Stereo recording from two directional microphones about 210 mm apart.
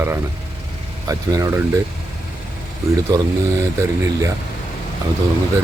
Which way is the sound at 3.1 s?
20° right (ahead or behind).